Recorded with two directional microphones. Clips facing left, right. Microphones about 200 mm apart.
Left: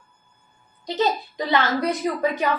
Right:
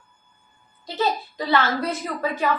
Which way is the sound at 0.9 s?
20° left (ahead or behind).